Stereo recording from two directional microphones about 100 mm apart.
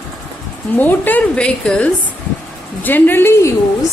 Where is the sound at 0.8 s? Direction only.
20° left (ahead or behind).